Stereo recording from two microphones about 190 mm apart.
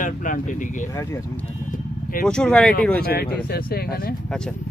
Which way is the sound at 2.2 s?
5° left (ahead or behind).